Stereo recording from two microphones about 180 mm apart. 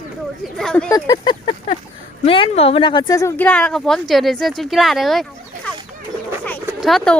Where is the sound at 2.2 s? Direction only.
30° left (ahead or behind); by 5.7 s centre (ahead or behind).